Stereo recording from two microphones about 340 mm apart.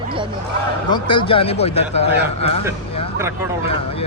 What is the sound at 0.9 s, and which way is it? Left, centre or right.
A man's voice, centre.